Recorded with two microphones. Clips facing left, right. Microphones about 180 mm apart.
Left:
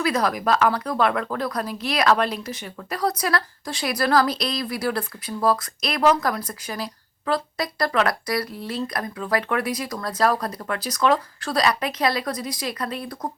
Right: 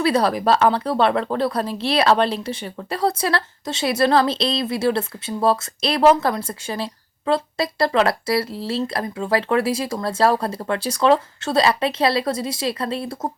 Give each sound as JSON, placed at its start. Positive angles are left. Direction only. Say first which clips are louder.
{"t": 0.0, "sound": "speech", "louder": "right 4 dB", "side_deg": -30}